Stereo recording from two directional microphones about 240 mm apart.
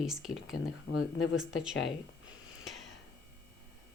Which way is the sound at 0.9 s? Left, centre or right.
Left.